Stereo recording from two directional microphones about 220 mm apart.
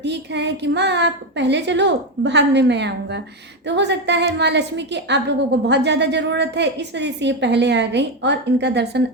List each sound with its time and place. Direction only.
0.0 s a woman's voice: 50° right (ahead or behind)